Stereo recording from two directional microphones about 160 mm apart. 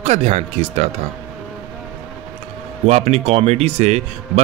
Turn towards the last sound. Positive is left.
turn(degrees=-45)  # may be behind; listen again after turning